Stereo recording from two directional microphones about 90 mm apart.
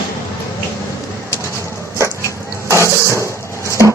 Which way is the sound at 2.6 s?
30° right (ahead or behind).